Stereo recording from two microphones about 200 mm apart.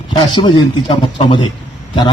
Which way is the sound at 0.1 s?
25° left (ahead or behind).